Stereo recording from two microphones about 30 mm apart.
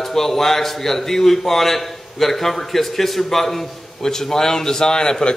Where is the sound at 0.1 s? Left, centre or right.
Centre.